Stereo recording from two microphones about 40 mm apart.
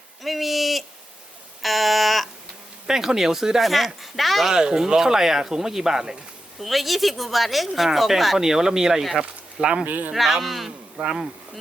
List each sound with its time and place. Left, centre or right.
0.2 s a sound: centre
2.8 s speech: centre
3.6 s speech: centre
4.5 s speech: centre
6.6 s speech: centre
9.8 s speech: right
10.2 s speech: centre